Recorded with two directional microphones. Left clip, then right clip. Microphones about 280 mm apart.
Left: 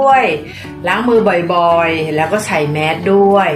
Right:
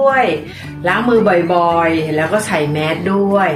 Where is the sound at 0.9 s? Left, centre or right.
Centre.